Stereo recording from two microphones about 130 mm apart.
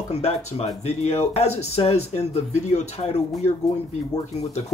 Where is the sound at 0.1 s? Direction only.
55° left (ahead or behind).